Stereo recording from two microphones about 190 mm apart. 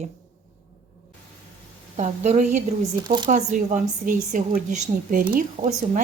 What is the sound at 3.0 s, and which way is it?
Speech, 20° right (ahead or behind).